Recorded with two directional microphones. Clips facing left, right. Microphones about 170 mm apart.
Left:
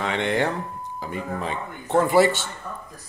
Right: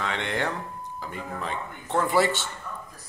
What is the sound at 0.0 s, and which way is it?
Speech, 20° left (ahead or behind).